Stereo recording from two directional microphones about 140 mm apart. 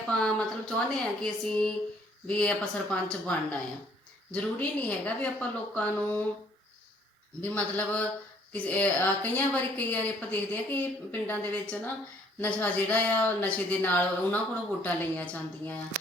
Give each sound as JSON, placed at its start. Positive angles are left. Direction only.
{"t": 0.1, "sound": "speech", "side_deg": 5}
{"t": 7.4, "sound": "speech", "side_deg": 10}